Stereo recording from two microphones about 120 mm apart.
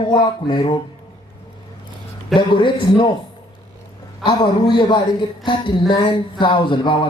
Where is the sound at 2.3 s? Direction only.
40° left (ahead or behind).